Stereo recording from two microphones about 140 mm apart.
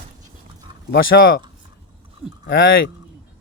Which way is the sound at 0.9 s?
90° left.